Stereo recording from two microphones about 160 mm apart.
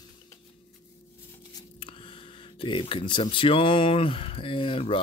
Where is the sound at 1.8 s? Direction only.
35° left (ahead or behind).